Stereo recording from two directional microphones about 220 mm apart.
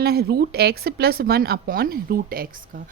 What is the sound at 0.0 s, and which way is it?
Speech, 45° right (ahead or behind).